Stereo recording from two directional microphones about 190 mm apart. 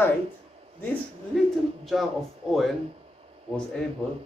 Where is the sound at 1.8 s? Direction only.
Centre (ahead or behind).